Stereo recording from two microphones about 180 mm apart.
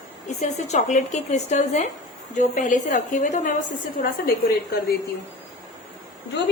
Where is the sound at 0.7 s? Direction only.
40° left (ahead or behind).